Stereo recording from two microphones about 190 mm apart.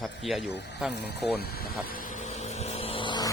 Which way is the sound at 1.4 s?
55° left (ahead or behind).